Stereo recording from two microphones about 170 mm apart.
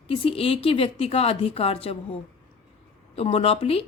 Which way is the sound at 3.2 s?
35° left (ahead or behind).